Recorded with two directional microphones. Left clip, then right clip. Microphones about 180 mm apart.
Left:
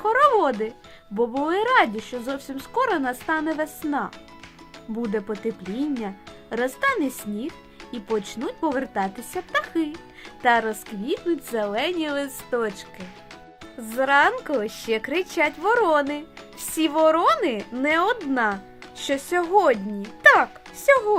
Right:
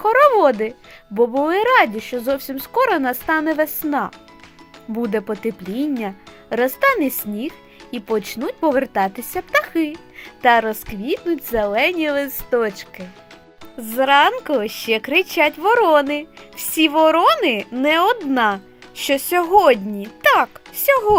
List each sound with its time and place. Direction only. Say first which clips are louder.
0.0 s a child's voice: right 6 dB; 30° right (ahead or behind)